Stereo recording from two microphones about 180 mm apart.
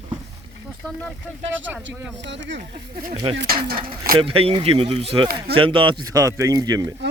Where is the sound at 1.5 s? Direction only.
90° right.